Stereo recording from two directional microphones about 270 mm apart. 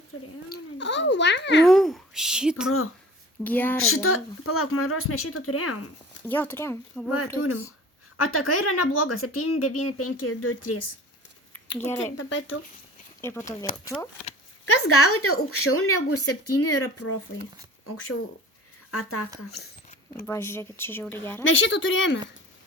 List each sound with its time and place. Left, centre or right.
0.1 s a child's voice: left
1.6 s speech: centre
3.8 s speech: left
6.2 s speech: centre
7.3 s speech: left
13.2 s speech: centre
14.6 s speech: left
19.5 s a sound: left
20.2 s speech: centre
21.4 s speech: left